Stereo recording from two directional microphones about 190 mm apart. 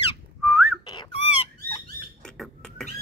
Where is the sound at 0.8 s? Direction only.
20° left (ahead or behind).